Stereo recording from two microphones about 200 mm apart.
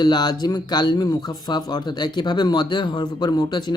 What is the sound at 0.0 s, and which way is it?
Mantra, 20° left (ahead or behind).